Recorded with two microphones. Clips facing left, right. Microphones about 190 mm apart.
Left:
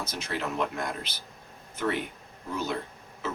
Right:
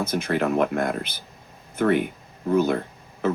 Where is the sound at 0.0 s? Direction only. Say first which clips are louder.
Right 10 dB; 55° right (ahead or behind).